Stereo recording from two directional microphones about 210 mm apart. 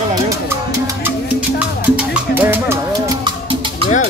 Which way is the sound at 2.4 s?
10° right (ahead or behind).